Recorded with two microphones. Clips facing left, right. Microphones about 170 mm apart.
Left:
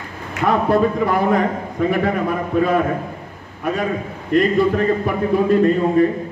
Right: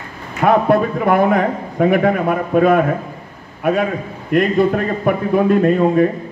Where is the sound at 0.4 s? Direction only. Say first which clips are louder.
Right 3 dB; 55° right (ahead or behind).